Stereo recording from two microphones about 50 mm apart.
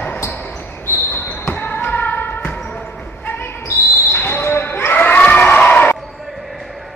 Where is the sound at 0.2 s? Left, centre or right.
Left.